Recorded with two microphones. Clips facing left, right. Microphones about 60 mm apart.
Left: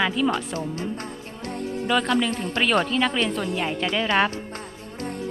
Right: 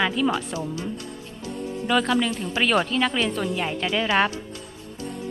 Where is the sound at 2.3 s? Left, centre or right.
Left.